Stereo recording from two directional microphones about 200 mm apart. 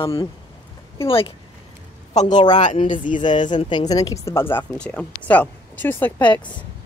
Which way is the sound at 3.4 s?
25° left (ahead or behind).